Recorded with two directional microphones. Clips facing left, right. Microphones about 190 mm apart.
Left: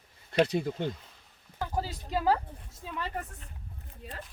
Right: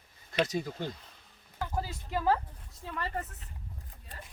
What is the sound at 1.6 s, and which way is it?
Speech, 15° left (ahead or behind).